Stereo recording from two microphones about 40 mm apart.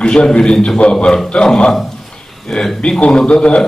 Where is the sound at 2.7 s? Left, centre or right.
Left.